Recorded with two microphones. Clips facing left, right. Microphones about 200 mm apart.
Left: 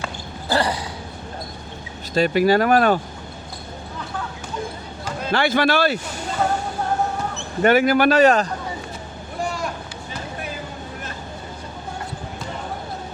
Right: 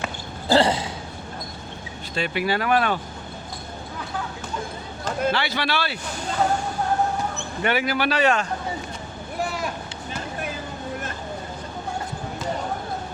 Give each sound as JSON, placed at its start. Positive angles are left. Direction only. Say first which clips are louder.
{"t": 0.0, "sound": "a sound", "louder": "even", "side_deg": -20}
{"t": 2.1, "sound": "speech", "louder": "left 8 dB", "side_deg": 40}
{"t": 5.3, "sound": "a man's voice", "louder": "left 6 dB", "side_deg": 50}
{"t": 7.6, "sound": "a man's voice", "louder": "left 8 dB", "side_deg": 45}